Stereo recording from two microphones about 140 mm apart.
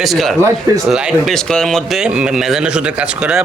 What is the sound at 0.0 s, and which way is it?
A man's voice, centre (ahead or behind).